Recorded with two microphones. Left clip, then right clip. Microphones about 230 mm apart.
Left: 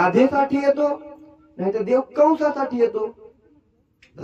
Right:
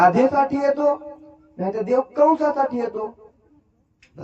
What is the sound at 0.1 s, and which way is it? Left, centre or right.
Speech, left.